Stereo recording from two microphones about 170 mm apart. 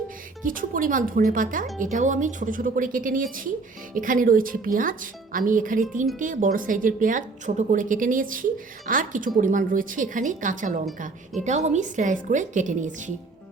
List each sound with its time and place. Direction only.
0.4 s speech: 55° right (ahead or behind)